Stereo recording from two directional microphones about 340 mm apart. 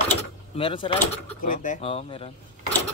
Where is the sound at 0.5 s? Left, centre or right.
Centre.